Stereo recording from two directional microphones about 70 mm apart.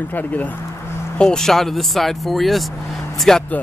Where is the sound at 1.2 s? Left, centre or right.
Centre.